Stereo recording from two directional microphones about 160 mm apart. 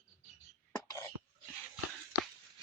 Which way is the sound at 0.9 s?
15° left (ahead or behind).